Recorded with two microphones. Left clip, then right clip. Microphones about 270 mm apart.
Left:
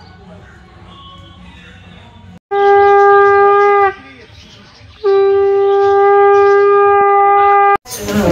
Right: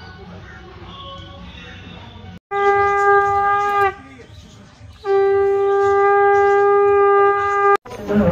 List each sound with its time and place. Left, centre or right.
2.5 s shofar: left
5.1 s shofar: left